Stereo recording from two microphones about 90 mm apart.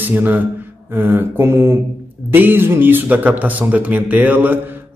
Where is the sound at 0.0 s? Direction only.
20° right (ahead or behind).